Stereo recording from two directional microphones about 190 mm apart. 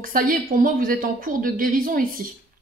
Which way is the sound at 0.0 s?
45° right (ahead or behind).